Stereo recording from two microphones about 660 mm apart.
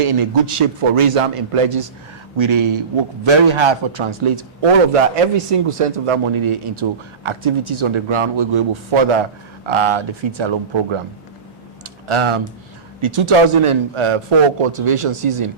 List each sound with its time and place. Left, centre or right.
0.0 s speech: right
12.0 s speech: right